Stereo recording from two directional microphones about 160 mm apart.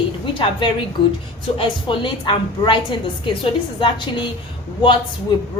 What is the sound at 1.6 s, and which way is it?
A woman's voice, 30° left (ahead or behind).